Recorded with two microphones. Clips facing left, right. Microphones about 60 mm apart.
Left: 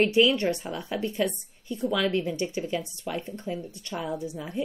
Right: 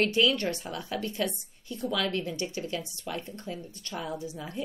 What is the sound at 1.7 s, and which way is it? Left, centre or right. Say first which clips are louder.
Speech: left 4 dB; centre.